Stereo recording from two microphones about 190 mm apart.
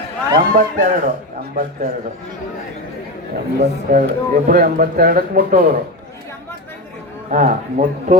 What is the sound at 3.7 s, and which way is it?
Speech, 45° right (ahead or behind).